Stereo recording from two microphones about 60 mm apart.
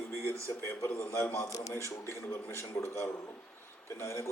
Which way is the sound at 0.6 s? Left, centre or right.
Left.